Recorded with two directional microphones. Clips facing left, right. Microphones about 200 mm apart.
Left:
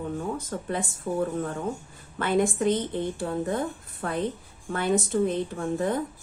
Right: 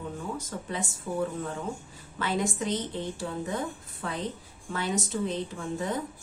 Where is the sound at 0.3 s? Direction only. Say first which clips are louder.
Left 4 dB; 55° left (ahead or behind).